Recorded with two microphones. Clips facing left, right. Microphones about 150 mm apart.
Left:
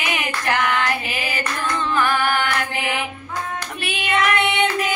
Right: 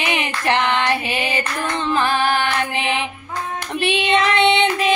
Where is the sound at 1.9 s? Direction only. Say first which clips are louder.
Right 2 dB; 25° right (ahead or behind).